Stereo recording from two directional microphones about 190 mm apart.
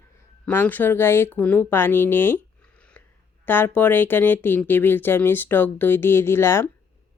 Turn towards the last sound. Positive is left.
turn(degrees=15)  # may be behind; listen again after turning